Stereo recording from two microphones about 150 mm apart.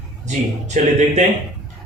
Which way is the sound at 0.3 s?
50° right (ahead or behind).